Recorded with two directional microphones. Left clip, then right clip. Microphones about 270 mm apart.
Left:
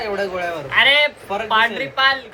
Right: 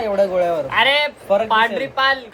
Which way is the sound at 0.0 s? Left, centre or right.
Right.